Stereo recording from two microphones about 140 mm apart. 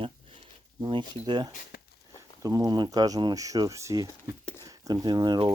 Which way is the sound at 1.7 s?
90° left.